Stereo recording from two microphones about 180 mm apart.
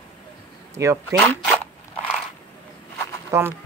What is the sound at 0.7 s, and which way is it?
Speech, 15° right (ahead or behind).